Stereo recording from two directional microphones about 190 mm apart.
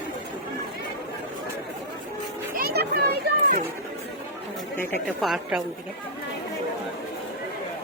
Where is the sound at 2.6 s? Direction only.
55° right (ahead or behind).